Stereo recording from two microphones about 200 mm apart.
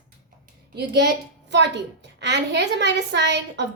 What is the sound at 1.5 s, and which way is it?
A woman's voice, 60° right (ahead or behind).